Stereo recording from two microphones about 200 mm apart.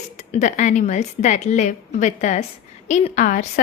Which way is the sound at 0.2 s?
35° left (ahead or behind).